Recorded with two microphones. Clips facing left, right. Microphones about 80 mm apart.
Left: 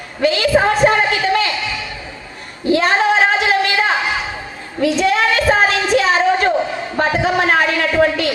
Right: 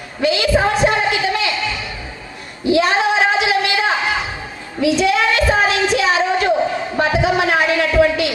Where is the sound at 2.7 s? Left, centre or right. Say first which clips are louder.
Left 1 dB; left.